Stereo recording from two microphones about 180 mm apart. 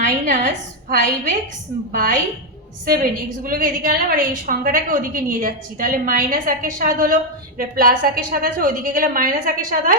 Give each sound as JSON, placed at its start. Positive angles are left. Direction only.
{"t": 0.3, "sound": "a woman's voice", "side_deg": -45}